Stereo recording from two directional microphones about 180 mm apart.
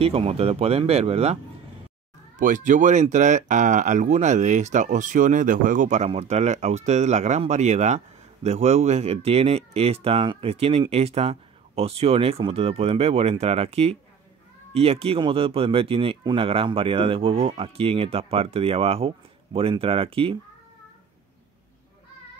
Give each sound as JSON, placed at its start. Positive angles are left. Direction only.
{"t": 0.0, "sound": "speech", "side_deg": -30}
{"t": 2.3, "sound": "speech", "side_deg": -45}